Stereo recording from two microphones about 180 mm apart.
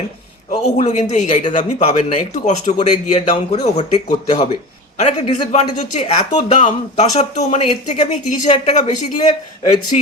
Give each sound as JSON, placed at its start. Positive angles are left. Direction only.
{"t": 0.6, "sound": "a man's voice", "side_deg": 40}